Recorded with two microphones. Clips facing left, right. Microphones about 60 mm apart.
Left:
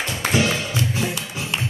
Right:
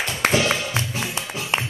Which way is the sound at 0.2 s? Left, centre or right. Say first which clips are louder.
Right 1 dB; right.